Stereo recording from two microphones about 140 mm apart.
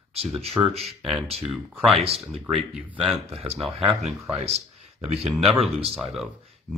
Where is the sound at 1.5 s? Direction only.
Centre (ahead or behind).